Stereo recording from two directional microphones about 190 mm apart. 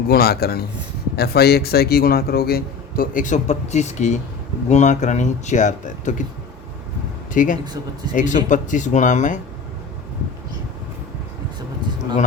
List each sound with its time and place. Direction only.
0.1 s a man's voice: 55° left (ahead or behind)
7.3 s a man's voice: 45° left (ahead or behind)
7.6 s speech: 20° right (ahead or behind)
8.1 s speech: 40° left (ahead or behind)